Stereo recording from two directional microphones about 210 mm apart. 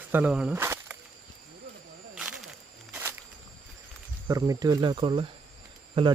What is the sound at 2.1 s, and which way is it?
Walk, 5° right (ahead or behind).